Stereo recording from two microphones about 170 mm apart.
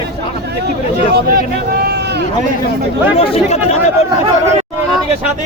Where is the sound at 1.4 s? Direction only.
70° right (ahead or behind).